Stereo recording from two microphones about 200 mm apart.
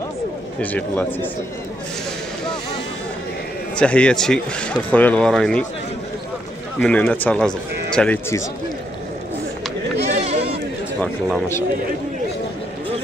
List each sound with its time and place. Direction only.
0.6 s speech: 5° left (ahead or behind)
3.7 s a man's voice: 5° left (ahead or behind)
6.8 s speech: 5° left (ahead or behind)
10.0 s bleat: 30° right (ahead or behind)
11.0 s a man's voice: centre (ahead or behind)